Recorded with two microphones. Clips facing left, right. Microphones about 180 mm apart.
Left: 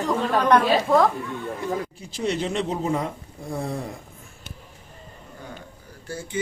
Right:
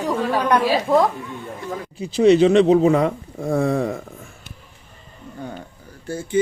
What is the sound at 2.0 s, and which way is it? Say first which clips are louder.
Speech: right 13 dB; 75° right (ahead or behind).